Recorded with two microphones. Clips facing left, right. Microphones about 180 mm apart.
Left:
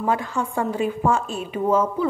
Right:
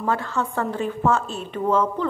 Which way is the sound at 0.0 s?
15° left (ahead or behind).